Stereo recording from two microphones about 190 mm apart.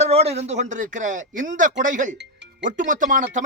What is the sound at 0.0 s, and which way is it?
Speech, 35° right (ahead or behind).